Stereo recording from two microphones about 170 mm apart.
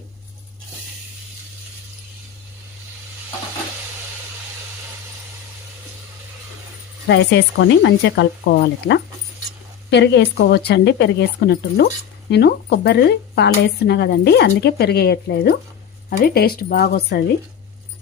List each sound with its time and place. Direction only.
7.1 s speech: 90° left; by 17.2 s 70° left (ahead or behind)